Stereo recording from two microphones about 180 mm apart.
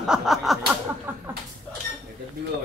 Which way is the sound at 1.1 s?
10° right (ahead or behind).